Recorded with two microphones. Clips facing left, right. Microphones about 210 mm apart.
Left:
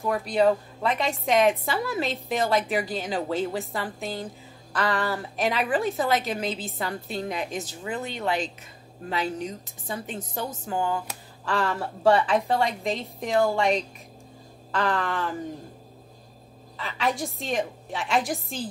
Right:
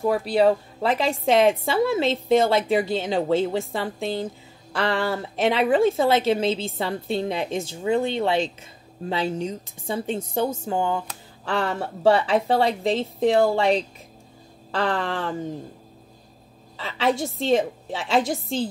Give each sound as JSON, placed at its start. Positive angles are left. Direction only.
{"t": 0.0, "sound": "a woman's voice", "side_deg": -30}
{"t": 16.7, "sound": "a woman's voice", "side_deg": -30}